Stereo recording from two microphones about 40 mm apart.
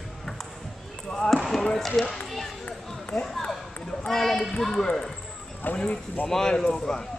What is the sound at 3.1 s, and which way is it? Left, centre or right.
Speech, centre.